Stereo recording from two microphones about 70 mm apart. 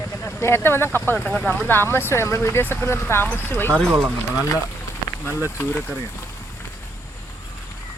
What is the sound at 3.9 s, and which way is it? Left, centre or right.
Speech, right.